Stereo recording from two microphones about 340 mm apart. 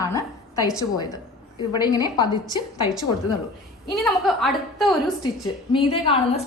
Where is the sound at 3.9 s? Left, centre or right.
Centre.